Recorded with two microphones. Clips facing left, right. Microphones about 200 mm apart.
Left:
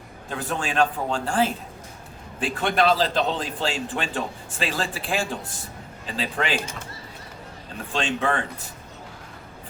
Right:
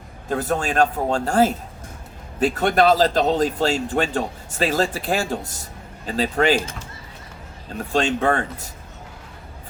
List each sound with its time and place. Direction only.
0.3 s a man's voice: 40° right (ahead or behind)
7.9 s a man's voice: 40° right (ahead or behind)